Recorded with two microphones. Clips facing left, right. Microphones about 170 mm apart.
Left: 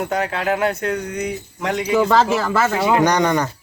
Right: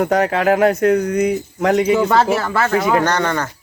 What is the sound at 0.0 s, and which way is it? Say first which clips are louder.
Speech: right 6 dB; 40° right (ahead or behind).